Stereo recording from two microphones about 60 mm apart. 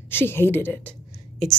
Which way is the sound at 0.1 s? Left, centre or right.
Left.